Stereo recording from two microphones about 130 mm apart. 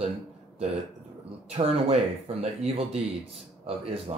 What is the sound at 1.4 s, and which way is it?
Speech, 55° right (ahead or behind).